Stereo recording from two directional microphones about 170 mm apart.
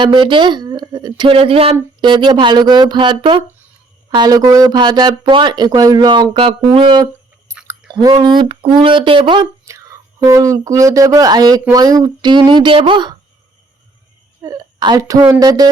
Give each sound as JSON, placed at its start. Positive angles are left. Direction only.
{"t": 0.0, "sound": "speech", "side_deg": -30}
{"t": 6.7, "sound": "a sound", "side_deg": -25}
{"t": 7.9, "sound": "speech", "side_deg": -25}
{"t": 14.4, "sound": "a woman's voice", "side_deg": -20}